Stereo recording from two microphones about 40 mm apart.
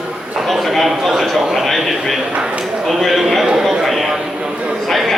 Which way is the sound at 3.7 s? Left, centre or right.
Centre.